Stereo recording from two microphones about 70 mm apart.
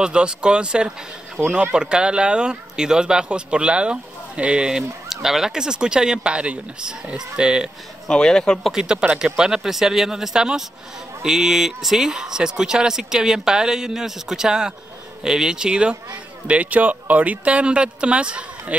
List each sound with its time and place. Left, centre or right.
0.0 s speech: centre
8.1 s speech: centre
8.7 s speech: centre